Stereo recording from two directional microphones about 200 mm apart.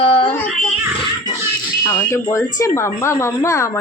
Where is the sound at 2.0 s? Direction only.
15° left (ahead or behind).